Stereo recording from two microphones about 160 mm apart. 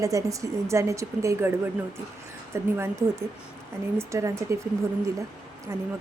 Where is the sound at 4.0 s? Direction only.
20° right (ahead or behind).